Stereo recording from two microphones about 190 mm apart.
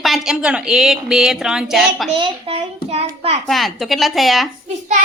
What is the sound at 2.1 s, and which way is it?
A child's voice, 30° right (ahead or behind).